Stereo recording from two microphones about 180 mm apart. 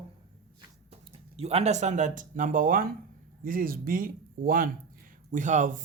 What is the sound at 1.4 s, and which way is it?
Speech, 35° right (ahead or behind).